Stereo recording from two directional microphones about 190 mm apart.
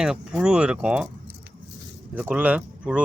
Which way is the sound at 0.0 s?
5° right (ahead or behind).